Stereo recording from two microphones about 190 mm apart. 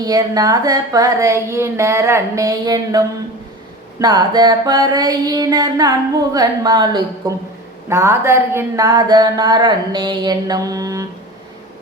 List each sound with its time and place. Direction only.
0.0 s speech: 20° right (ahead or behind)
4.0 s speech: 20° right (ahead or behind)